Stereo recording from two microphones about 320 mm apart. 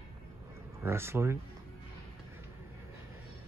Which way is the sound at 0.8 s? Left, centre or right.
Centre.